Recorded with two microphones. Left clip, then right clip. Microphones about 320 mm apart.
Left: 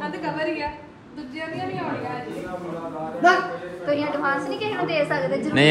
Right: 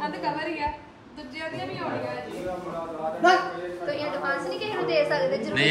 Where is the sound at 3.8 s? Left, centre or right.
Centre.